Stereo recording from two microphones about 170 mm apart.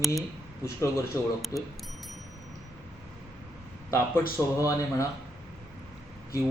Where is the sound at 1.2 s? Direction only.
20° left (ahead or behind).